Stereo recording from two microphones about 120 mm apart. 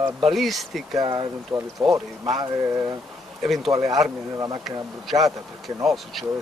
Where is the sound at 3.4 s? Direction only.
Centre (ahead or behind).